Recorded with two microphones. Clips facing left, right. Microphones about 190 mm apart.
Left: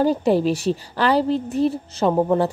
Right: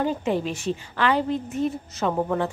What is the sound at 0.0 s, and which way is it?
A woman's voice, 35° left (ahead or behind).